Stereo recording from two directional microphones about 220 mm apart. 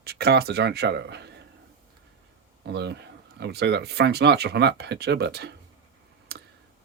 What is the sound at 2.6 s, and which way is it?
Speech, 50° right (ahead or behind).